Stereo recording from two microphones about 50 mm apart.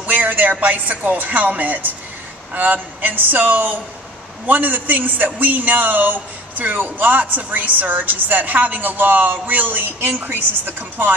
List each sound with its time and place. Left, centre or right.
0.0 s a woman's voice: right